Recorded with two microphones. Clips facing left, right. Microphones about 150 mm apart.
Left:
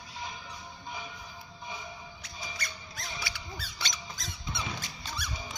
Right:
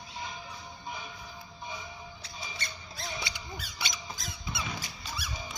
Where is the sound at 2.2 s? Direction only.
30° right (ahead or behind); by 4.0 s 10° right (ahead or behind).